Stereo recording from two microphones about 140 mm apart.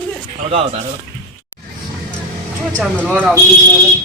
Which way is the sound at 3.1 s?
10° right (ahead or behind).